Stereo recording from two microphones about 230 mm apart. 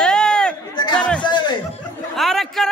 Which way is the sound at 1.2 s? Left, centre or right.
Centre.